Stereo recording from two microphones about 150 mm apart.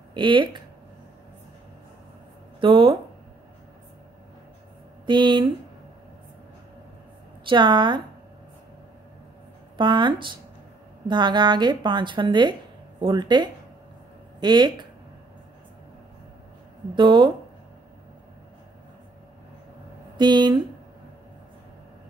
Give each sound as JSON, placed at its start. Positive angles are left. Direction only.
{"t": 0.1, "sound": "speech", "side_deg": -30}
{"t": 2.6, "sound": "speech", "side_deg": -35}
{"t": 5.0, "sound": "speech", "side_deg": -30}
{"t": 7.4, "sound": "speech", "side_deg": -30}
{"t": 9.8, "sound": "speech", "side_deg": -30}
{"t": 16.9, "sound": "speech", "side_deg": -30}
{"t": 20.2, "sound": "speech", "side_deg": -30}